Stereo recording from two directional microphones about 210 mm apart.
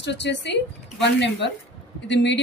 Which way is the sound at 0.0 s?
55° left (ahead or behind).